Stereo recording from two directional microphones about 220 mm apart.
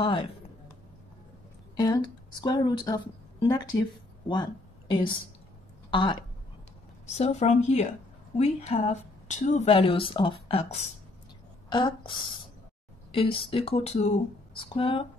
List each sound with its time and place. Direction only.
0.0 s speech: 20° left (ahead or behind)
2.4 s speech: 20° left (ahead or behind)